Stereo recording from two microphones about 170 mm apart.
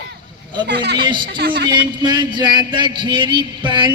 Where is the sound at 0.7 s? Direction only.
80° right.